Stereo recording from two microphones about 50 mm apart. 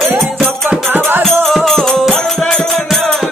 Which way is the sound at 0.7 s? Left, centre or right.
Right.